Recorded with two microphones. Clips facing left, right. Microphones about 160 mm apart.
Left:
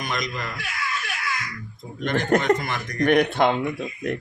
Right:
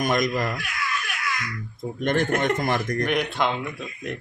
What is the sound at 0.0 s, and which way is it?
Speech, 45° right (ahead or behind).